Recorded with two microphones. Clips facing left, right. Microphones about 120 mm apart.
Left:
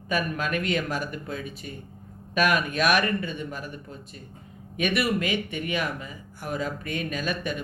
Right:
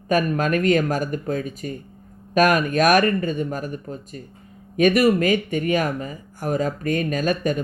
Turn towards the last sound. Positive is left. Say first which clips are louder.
# right 8 dB
turn(degrees=-45)  # may be behind; listen again after turning